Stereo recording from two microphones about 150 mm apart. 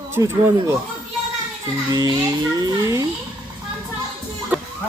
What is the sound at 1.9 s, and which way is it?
A child's voice, 25° right (ahead or behind).